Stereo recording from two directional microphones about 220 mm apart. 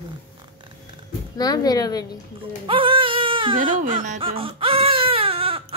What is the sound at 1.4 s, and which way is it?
Speech, 15° left (ahead or behind).